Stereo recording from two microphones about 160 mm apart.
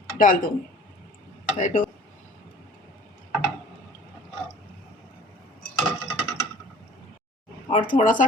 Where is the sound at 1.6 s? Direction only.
50° left (ahead or behind).